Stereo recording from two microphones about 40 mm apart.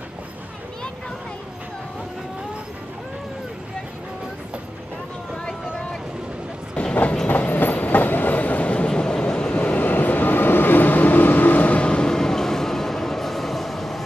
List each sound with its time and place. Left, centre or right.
5.3 s a sound: centre
6.7 s train: left
7.2 s train: left
9.6 s train: left
11.8 s vehicle: left; by 14.0 s centre